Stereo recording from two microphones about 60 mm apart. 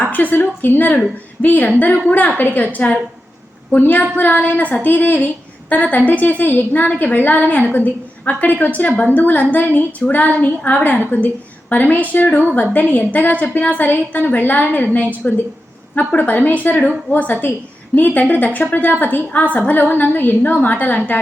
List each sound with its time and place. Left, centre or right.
0.1 s a woman's voice: left
3.7 s a woman's voice: left